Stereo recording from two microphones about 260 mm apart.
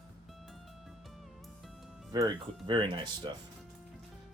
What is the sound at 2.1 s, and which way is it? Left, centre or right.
Speech, centre.